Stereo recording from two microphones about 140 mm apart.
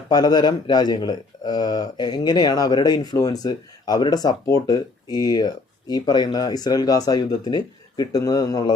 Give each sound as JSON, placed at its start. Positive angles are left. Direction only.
{"t": 0.1, "sound": "speech", "side_deg": 30}